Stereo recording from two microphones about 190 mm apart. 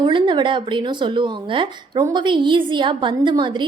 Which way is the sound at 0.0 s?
25° right (ahead or behind).